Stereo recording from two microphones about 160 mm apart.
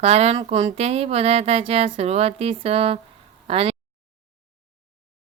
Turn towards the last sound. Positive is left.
turn(degrees=-35)  # may be behind; listen again after turning